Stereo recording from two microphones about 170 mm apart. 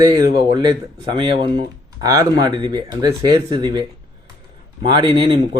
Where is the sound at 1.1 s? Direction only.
25° right (ahead or behind).